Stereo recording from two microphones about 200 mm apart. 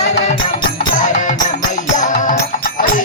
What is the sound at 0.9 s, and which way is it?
Music, 40° left (ahead or behind).